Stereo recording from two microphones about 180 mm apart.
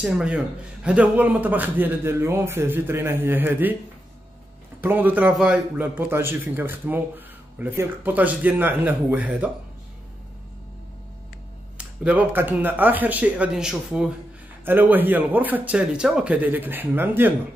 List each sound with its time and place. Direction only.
0.0 s a man's voice: 5° right (ahead or behind)
4.8 s a man's voice: 10° right (ahead or behind)
11.8 s a man's voice: 5° right (ahead or behind)